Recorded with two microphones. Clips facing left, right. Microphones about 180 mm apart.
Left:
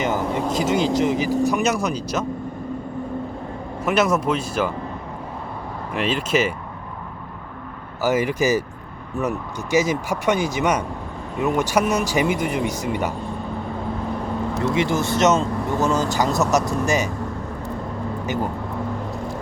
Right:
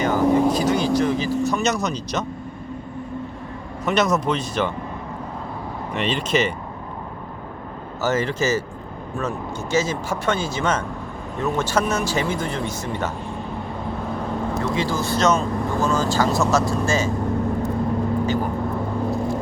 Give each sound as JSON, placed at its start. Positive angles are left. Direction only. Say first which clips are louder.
{"t": 0.0, "sound": "vehicle", "louder": "right 5 dB", "side_deg": 20}
{"t": 1.5, "sound": "speech", "louder": "left 1 dB", "side_deg": 10}
{"t": 3.8, "sound": "speech", "louder": "left 1 dB", "side_deg": 5}
{"t": 5.9, "sound": "speech", "louder": "left 1 dB", "side_deg": 5}
{"t": 8.0, "sound": "speech", "louder": "left 2 dB", "side_deg": 10}
{"t": 9.7, "sound": "speech", "louder": "left 3 dB", "side_deg": 15}
{"t": 14.8, "sound": "speech", "louder": "left 3 dB", "side_deg": 20}